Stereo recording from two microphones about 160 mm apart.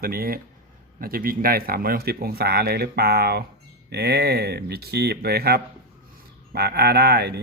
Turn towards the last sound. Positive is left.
turn(degrees=-90)